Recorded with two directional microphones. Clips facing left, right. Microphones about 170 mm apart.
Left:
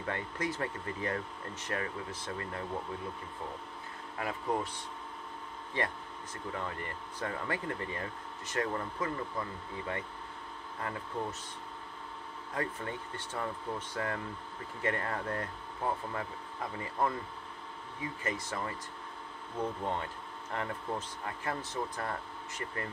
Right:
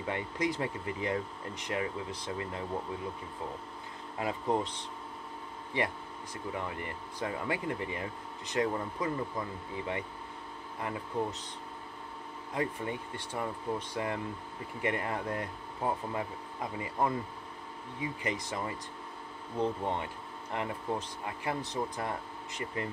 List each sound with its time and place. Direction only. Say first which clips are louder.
0.0 s speech: right 3 dB; 15° right (ahead or behind)
4.2 s speech: right 3 dB; 20° right (ahead or behind)
5.7 s speech: right 2 dB; 15° right (ahead or behind)
12.5 s speech: right 3 dB; 15° right (ahead or behind)